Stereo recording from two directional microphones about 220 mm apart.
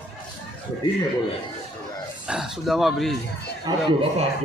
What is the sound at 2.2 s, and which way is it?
Speech, centre (ahead or behind).